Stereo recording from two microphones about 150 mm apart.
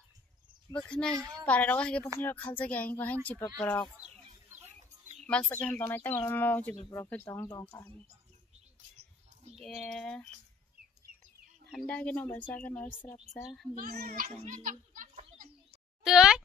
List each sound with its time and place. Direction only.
0.7 s speech: 5° left (ahead or behind)
5.5 s speech: 15° left (ahead or behind)
9.6 s speech: centre (ahead or behind)
11.7 s speech: 10° left (ahead or behind)
13.3 s speech: centre (ahead or behind)
13.7 s a child's voice: 70° right (ahead or behind)
16.0 s speech: 5° right (ahead or behind)